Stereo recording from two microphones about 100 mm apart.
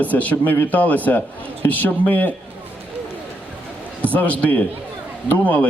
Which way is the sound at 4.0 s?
15° left (ahead or behind).